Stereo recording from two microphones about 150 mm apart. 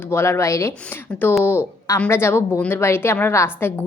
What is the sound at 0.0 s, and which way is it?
A woman's voice, 15° left (ahead or behind).